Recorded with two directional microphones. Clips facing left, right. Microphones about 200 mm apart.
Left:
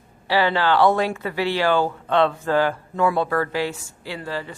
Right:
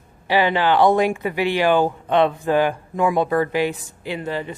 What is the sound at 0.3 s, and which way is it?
Speech, 15° right (ahead or behind).